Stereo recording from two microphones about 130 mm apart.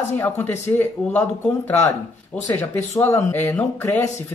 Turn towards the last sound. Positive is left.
turn(degrees=15)  # may be behind; listen again after turning